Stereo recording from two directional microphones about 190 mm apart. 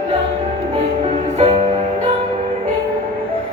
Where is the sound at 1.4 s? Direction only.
35° right (ahead or behind).